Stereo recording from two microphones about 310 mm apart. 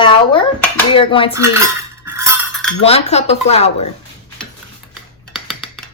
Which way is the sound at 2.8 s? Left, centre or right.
Centre.